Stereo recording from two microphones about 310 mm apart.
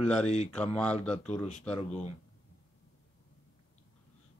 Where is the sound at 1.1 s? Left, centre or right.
Left.